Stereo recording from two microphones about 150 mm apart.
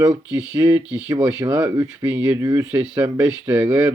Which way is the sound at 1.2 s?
20° right (ahead or behind).